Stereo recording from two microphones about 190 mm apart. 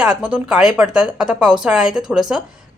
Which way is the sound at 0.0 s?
5° right (ahead or behind).